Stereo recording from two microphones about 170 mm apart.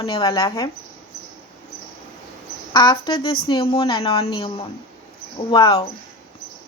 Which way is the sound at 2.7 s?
30° left (ahead or behind).